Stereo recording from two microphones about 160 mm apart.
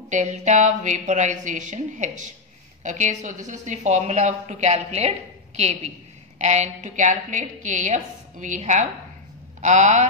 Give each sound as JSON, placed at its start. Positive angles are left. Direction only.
{"t": 0.1, "sound": "a woman's voice", "side_deg": -45}
{"t": 6.3, "sound": "a woman's voice", "side_deg": -45}